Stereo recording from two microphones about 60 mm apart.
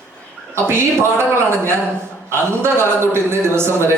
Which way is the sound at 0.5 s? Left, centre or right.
Right.